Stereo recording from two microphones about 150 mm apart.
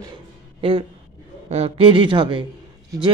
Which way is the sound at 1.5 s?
40° right (ahead or behind).